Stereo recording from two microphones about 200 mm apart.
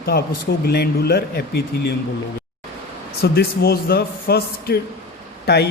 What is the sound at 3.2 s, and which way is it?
A man's voice, 50° left (ahead or behind).